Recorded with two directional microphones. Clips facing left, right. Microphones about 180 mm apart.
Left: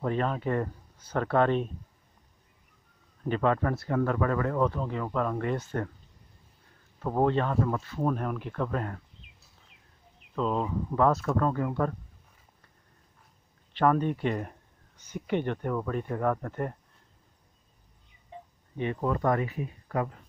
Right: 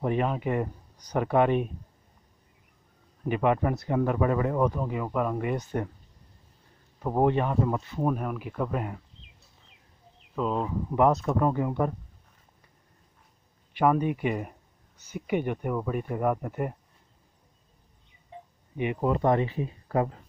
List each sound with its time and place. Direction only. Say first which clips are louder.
0.0 s speech: right 2 dB; 15° right (ahead or behind)
3.3 s speech: right 1 dB; 15° right (ahead or behind)
7.0 s speech: right 2 dB; 15° right (ahead or behind)
10.3 s speech: even; 5° right (ahead or behind)
11.0 s speech: right 2 dB; 20° right (ahead or behind)
13.7 s speech: right 1 dB; 10° right (ahead or behind)
18.8 s speech: right 3 dB; 15° right (ahead or behind)